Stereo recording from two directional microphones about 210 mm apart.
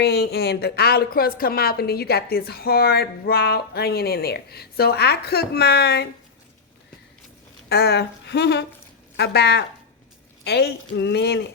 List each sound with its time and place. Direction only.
0.0 s a woman's voice: 50° left (ahead or behind)
7.7 s a woman's voice: 50° left (ahead or behind)